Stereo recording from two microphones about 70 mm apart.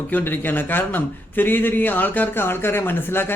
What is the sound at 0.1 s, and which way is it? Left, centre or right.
A man's voice, left.